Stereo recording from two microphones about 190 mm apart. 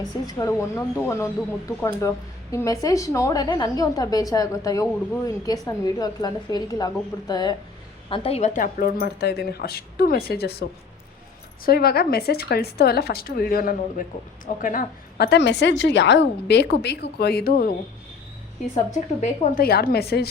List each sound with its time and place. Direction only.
0.3 s a woman's voice: 20° left (ahead or behind)
8.1 s a woman's voice: 30° left (ahead or behind); by 17.7 s 50° left (ahead or behind)
18.7 s speech: 40° left (ahead or behind); by 20.3 s 55° left (ahead or behind)